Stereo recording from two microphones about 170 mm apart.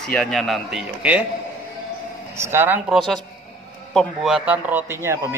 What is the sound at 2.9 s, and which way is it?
A man's voice, centre (ahead or behind).